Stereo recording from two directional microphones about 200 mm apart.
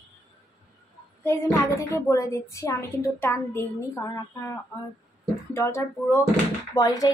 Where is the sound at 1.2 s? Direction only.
15° left (ahead or behind).